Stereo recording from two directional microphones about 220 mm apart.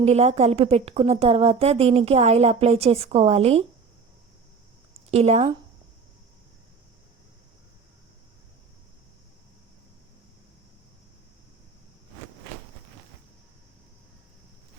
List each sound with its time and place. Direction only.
0.0 s a woman's voice: 30° right (ahead or behind)
5.1 s a woman's voice: 30° right (ahead or behind)